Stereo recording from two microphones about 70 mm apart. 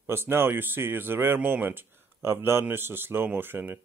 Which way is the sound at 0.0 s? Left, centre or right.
Right.